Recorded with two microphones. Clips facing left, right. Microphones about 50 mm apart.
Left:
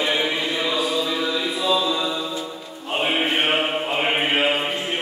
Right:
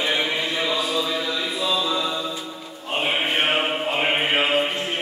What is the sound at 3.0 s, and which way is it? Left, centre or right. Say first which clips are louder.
Mantra: left 1 dB; centre.